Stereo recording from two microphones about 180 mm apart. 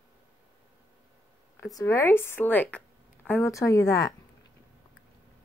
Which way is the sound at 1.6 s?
15° left (ahead or behind).